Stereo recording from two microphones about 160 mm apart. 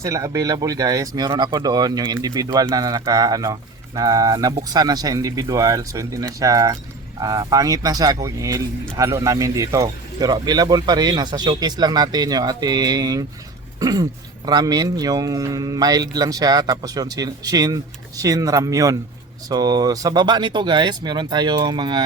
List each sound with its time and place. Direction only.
0.0 s speech: 20° right (ahead or behind)